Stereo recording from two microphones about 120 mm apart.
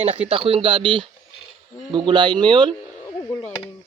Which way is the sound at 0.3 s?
50° right (ahead or behind).